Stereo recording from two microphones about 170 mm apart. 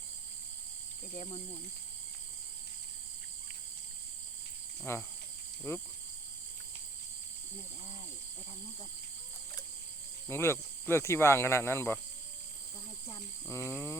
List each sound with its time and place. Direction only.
1.1 s cricket: 40° left (ahead or behind)
4.9 s cricket: 15° left (ahead or behind)
10.2 s cricket: 15° left (ahead or behind)
13.1 s cricket: 20° left (ahead or behind)